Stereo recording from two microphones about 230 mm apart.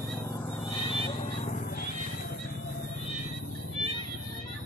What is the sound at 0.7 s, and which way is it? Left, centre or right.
Cat, left.